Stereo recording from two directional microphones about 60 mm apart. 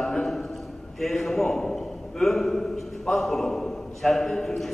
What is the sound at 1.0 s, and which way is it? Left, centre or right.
A man's voice, centre.